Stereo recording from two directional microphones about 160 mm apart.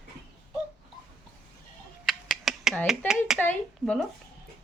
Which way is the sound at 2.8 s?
5° right (ahead or behind).